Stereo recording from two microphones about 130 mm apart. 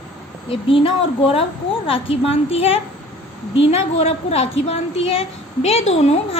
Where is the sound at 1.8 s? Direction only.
45° left (ahead or behind).